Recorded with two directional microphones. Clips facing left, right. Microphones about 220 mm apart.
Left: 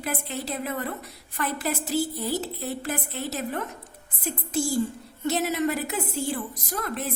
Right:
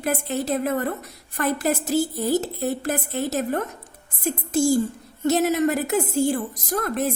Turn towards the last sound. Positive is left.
turn(degrees=-45)  # may be behind; listen again after turning